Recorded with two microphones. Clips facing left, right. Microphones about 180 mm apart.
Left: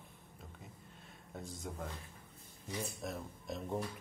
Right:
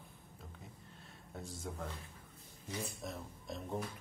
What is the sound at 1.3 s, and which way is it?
Speech, centre (ahead or behind).